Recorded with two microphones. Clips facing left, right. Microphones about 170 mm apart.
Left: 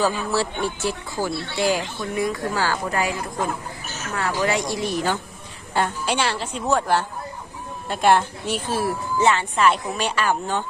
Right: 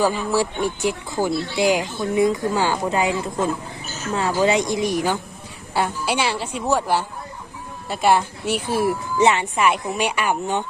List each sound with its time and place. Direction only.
0.0 s a woman's voice: 15° right (ahead or behind)